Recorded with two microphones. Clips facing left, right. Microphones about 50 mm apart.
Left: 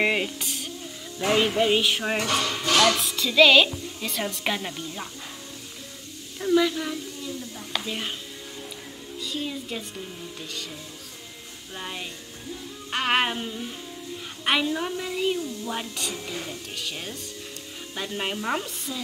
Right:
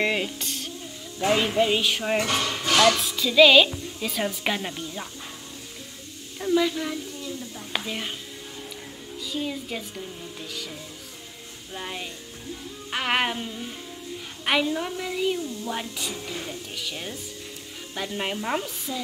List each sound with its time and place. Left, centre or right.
0.0 s sizzle: centre
1.3 s a woman's voice: centre
2.6 s music: right
3.0 s a woman's voice: centre
6.4 s speech: centre
7.7 s music: centre
9.2 s a woman's voice: centre
11.7 s a woman's voice: centre